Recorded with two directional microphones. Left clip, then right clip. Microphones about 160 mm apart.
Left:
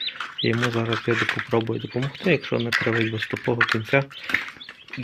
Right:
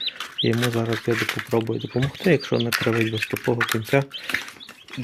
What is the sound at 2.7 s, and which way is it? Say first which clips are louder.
Speech: left 3 dB; 25° right (ahead or behind).